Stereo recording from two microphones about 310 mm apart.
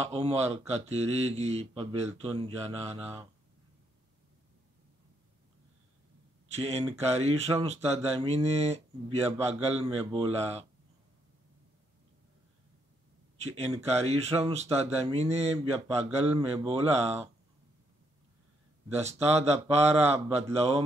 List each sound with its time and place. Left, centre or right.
0.0 s speech: centre
6.5 s speech: centre
13.4 s speech: centre
18.9 s speech: right